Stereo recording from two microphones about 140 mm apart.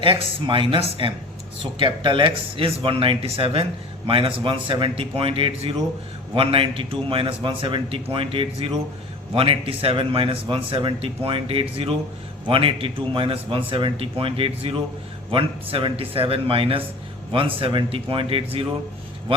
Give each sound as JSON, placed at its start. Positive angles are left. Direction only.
{"t": 0.0, "sound": "speech", "side_deg": -35}
{"t": 1.8, "sound": "speech", "side_deg": -35}